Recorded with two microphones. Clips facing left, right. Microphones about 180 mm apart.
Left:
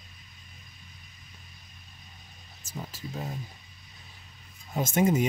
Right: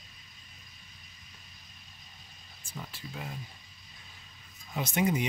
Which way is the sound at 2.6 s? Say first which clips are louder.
Left 4 dB; 40° left (ahead or behind).